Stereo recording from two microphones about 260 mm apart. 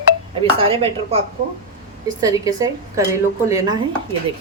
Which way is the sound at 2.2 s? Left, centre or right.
Centre.